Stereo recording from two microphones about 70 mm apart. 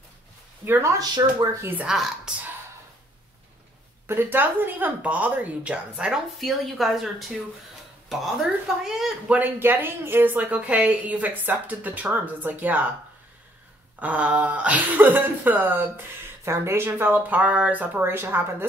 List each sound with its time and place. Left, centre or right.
0.7 s a woman's voice: right
0.9 s speech: right
1.9 s speech: centre
4.1 s a woman's voice: right; by 6.2 s centre
6.4 s speech: centre
9.3 s a woman's voice: right
13.9 s a woman's voice: centre
18.0 s a woman's voice: right